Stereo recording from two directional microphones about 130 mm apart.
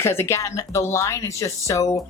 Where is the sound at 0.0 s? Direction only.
20° left (ahead or behind).